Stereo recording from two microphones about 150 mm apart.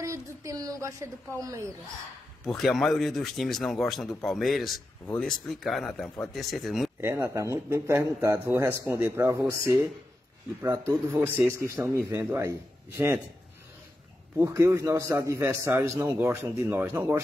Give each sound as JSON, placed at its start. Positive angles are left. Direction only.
{"t": 0.0, "sound": "a woman's voice", "side_deg": -20}
{"t": 2.4, "sound": "speech", "side_deg": 0}
{"t": 7.0, "sound": "a man's voice", "side_deg": -15}
{"t": 14.4, "sound": "a man's voice", "side_deg": -20}